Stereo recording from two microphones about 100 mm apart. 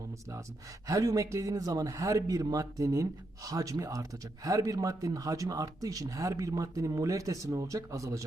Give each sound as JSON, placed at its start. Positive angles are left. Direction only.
{"t": 0.9, "sound": "speech", "side_deg": -35}